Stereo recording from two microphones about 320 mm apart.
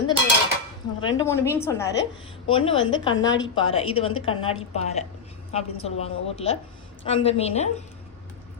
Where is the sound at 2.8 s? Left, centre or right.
Left.